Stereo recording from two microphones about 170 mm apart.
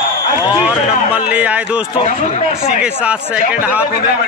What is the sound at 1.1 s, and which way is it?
Speech, 10° right (ahead or behind).